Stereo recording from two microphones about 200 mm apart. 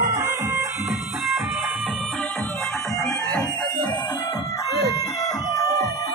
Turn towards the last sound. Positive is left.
turn(degrees=15)  # may be behind; listen again after turning